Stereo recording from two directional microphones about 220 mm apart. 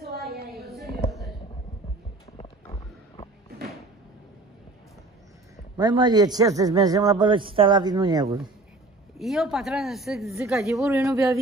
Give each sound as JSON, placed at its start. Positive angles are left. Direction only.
{"t": 2.3, "sound": "boat", "side_deg": 25}
{"t": 5.8, "sound": "a man's voice", "side_deg": -20}
{"t": 9.2, "sound": "a woman's voice", "side_deg": 0}
{"t": 10.4, "sound": "a man's voice", "side_deg": -15}